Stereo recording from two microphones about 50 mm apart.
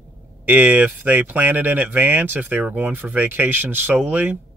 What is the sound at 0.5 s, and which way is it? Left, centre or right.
Speech, right.